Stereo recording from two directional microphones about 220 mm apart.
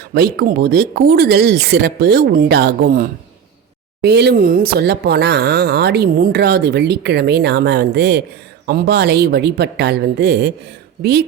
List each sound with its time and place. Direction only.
0.1 s speech: 45° right (ahead or behind)